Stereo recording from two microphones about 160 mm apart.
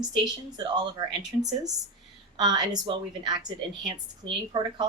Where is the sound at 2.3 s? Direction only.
25° right (ahead or behind).